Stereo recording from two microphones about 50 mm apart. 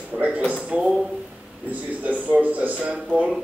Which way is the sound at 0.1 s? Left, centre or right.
Right.